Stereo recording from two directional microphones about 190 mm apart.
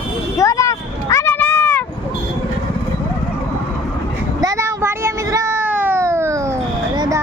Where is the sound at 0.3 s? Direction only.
15° left (ahead or behind).